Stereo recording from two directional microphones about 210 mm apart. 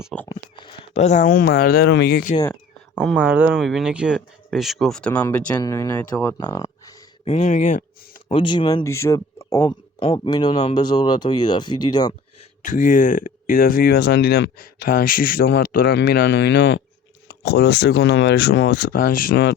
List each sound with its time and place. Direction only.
0.0 s a sound: 5° left (ahead or behind)
0.3 s speech: 20° left (ahead or behind); by 2.3 s 50° left (ahead or behind)
2.9 s speech: 5° left (ahead or behind)
3.2 s speech: 5° right (ahead or behind); by 6.1 s 15° left (ahead or behind)
6.3 s a sound: 20° left (ahead or behind)
7.3 s speech: 35° left (ahead or behind)
8.3 s speech: 25° left (ahead or behind)
9.6 s speech: 25° left (ahead or behind)
12.6 s speech: 40° left (ahead or behind)